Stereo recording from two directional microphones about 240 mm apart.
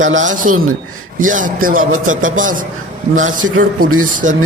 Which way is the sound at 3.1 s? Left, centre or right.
Right.